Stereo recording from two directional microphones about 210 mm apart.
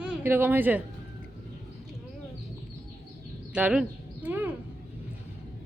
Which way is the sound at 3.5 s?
5° right (ahead or behind).